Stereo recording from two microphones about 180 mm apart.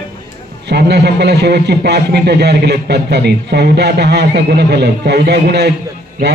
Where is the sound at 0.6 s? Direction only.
65° right (ahead or behind).